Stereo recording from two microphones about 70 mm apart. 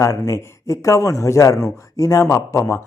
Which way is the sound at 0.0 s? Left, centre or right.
Left.